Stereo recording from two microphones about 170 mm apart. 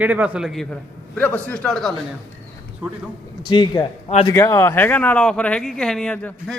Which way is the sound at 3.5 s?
25° left (ahead or behind).